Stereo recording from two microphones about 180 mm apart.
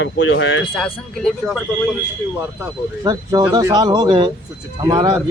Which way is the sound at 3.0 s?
20° right (ahead or behind).